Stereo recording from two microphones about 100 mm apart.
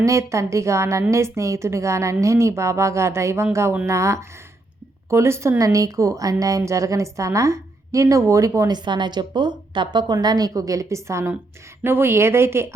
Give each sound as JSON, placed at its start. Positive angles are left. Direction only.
{"t": 0.0, "sound": "a woman's voice", "side_deg": -30}
{"t": 8.7, "sound": "speech", "side_deg": -50}